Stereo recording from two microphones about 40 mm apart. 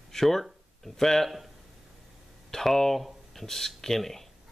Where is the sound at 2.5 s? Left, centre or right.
Centre.